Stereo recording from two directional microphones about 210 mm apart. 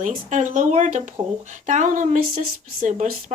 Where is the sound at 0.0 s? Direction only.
35° right (ahead or behind).